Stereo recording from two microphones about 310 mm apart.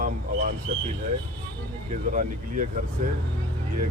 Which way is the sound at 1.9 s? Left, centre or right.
Right.